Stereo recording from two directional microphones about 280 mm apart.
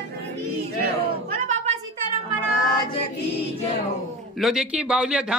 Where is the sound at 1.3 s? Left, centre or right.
Right.